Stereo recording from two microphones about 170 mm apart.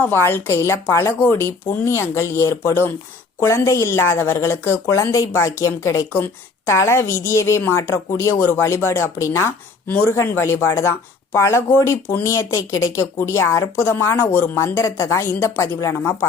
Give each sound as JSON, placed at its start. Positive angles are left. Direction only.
{"t": 0.0, "sound": "a woman's voice", "side_deg": 10}